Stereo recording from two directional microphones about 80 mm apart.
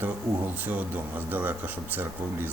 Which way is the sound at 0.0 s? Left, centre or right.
Right.